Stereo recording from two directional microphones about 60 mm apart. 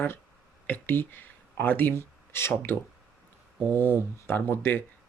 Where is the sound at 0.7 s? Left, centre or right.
Left.